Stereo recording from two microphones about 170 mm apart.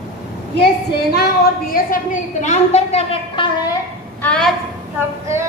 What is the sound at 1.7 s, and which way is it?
A woman's voice, 55° left (ahead or behind).